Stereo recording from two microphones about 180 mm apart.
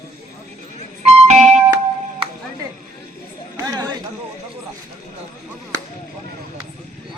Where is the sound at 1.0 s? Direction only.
40° right (ahead or behind).